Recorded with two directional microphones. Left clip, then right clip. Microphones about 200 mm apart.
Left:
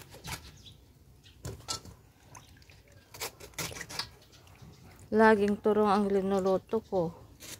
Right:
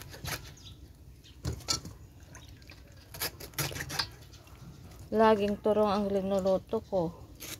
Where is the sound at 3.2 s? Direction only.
15° right (ahead or behind).